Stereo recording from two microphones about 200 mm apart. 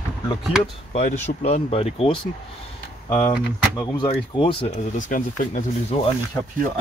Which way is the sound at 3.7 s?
20° left (ahead or behind).